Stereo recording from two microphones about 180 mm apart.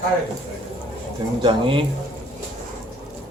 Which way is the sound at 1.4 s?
30° right (ahead or behind).